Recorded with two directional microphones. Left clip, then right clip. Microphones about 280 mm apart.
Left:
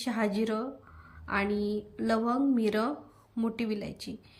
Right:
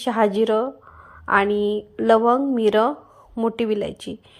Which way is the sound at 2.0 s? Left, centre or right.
Right.